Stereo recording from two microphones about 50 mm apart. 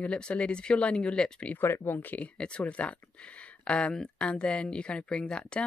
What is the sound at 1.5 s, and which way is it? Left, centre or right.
Speech, left.